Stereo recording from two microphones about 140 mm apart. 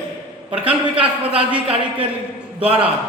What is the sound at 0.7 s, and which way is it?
A man's voice, 10° right (ahead or behind).